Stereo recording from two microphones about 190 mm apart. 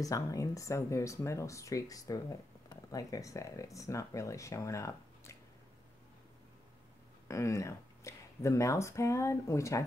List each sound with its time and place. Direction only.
0.0 s speech: 15° left (ahead or behind)
7.2 s speech: 15° left (ahead or behind)